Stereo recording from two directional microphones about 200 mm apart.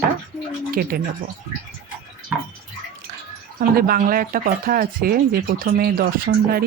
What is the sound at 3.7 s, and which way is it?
Speech, 45° right (ahead or behind).